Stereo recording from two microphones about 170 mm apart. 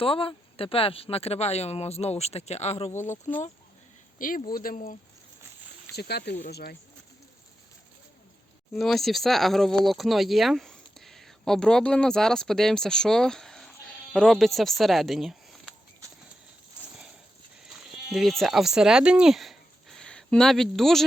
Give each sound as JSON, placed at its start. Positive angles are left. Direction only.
{"t": 0.0, "sound": "speech", "side_deg": 35}
{"t": 4.2, "sound": "speech", "side_deg": 50}
{"t": 5.9, "sound": "speech", "side_deg": 75}
{"t": 8.8, "sound": "speech", "side_deg": 0}
{"t": 17.6, "sound": "sheep", "side_deg": 0}